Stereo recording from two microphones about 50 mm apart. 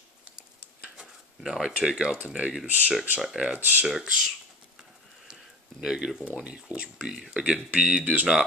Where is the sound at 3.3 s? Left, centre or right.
Centre.